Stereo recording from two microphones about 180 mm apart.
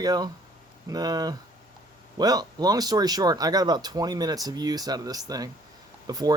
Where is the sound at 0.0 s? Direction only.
20° right (ahead or behind).